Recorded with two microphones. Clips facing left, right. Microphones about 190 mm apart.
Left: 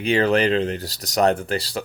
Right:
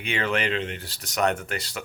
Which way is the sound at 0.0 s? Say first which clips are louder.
Left 8 dB; 35° left (ahead or behind).